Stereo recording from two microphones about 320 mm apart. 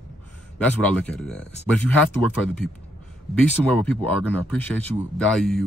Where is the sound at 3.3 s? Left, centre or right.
Centre.